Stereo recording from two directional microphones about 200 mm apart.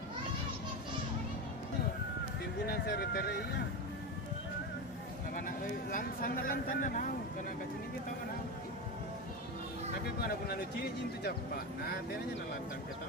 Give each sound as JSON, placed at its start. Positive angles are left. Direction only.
{"t": 2.6, "sound": "speech", "side_deg": 50}
{"t": 5.3, "sound": "speech", "side_deg": 45}
{"t": 10.2, "sound": "speech", "side_deg": 50}